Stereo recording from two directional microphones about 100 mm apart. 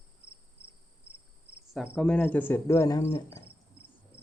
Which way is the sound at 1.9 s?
10° left (ahead or behind).